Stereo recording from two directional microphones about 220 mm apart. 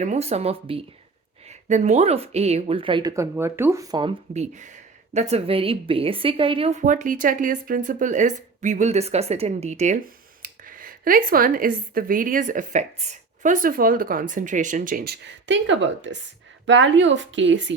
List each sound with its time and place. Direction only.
0.0 s speech: 30° right (ahead or behind)
4.5 s a woman's voice: 35° right (ahead or behind); by 17.7 s 55° right (ahead or behind)